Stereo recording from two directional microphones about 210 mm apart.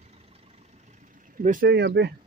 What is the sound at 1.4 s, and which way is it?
Speech, 40° right (ahead or behind).